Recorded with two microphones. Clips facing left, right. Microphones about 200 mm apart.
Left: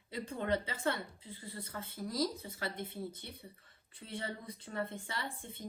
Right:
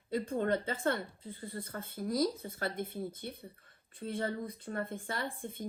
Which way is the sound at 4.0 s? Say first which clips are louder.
Right 7 dB; 50° right (ahead or behind).